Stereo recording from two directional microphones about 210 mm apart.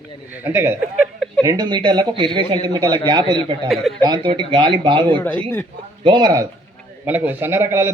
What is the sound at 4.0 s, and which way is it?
A man's voice, 20° right (ahead or behind).